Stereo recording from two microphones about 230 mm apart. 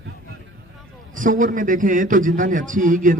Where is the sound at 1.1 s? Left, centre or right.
Right.